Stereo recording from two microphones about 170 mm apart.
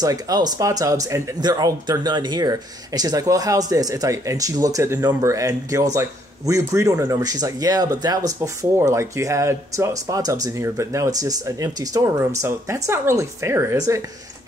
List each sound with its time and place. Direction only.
0.0 s speech: 20° right (ahead or behind)